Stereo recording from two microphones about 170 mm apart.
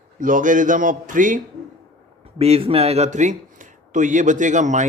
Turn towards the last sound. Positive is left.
turn(degrees=-45)  # may be behind; listen again after turning